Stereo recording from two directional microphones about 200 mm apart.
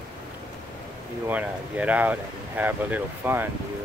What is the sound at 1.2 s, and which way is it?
Speech, 5° right (ahead or behind).